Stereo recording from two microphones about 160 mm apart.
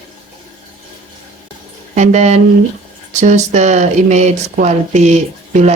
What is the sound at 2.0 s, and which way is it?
Speech, 45° right (ahead or behind).